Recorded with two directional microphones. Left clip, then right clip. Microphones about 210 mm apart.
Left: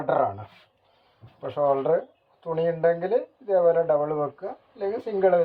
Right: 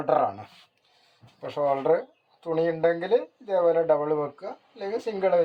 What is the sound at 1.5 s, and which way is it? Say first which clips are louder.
Speech: left 1 dB; 35° right (ahead or behind).